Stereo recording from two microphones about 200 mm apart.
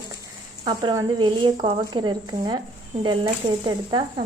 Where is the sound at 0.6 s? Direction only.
20° right (ahead or behind).